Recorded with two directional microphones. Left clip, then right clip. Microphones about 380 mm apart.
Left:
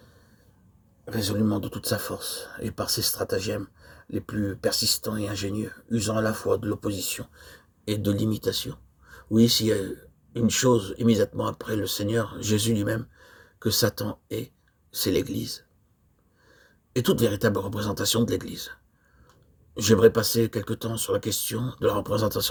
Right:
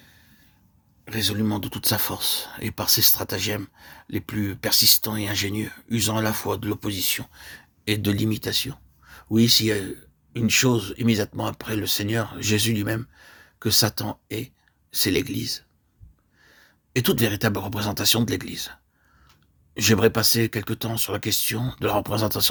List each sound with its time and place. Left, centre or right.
1.5 s speech: right
19.8 s speech: right